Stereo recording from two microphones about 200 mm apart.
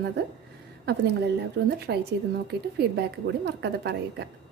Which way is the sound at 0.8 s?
55° right (ahead or behind).